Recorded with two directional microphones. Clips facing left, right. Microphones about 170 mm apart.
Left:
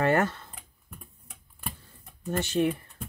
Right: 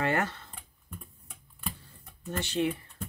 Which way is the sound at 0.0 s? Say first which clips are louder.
Left 5 dB; 45° left (ahead or behind).